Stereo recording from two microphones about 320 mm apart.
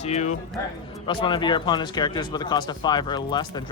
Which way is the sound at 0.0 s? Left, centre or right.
Left.